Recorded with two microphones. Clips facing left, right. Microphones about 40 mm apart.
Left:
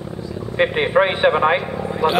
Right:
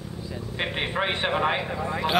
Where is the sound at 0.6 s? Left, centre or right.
Centre.